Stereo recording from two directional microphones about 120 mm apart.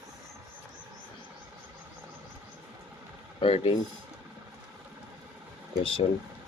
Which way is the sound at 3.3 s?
50° left (ahead or behind).